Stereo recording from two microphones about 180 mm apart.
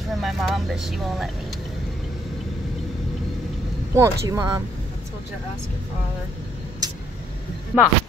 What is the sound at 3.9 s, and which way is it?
Speech, 15° right (ahead or behind).